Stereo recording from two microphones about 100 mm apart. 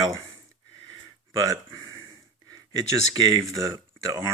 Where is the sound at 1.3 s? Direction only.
35° right (ahead or behind).